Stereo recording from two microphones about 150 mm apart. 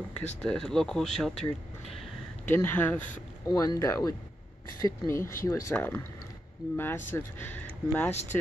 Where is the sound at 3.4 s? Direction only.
25° left (ahead or behind).